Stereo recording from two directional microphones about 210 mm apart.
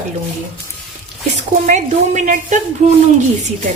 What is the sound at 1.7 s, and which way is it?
Speech, 35° right (ahead or behind).